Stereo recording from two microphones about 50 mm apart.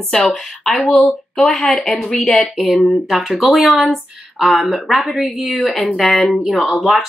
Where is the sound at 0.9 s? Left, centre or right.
Centre.